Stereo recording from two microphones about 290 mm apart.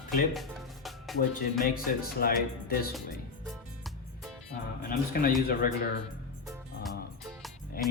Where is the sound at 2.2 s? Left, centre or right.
Left.